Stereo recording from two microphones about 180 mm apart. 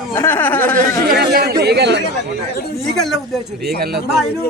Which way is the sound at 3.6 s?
65° right (ahead or behind).